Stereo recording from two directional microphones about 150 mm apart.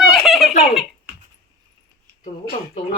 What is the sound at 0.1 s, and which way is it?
Giggle, centre (ahead or behind).